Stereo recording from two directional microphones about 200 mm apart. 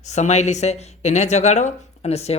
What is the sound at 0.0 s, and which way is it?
Speech, 35° left (ahead or behind).